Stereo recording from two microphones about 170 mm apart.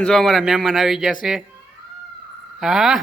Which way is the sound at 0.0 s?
Centre (ahead or behind).